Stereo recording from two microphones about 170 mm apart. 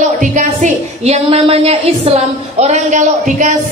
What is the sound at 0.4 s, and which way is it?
A woman's voice, 40° right (ahead or behind).